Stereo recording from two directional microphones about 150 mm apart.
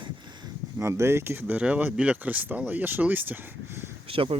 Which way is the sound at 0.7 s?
20° right (ahead or behind).